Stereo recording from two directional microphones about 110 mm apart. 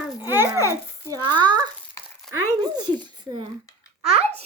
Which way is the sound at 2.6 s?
45° right (ahead or behind).